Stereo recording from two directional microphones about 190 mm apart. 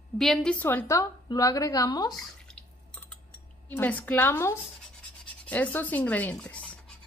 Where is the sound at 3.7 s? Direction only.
10° left (ahead or behind).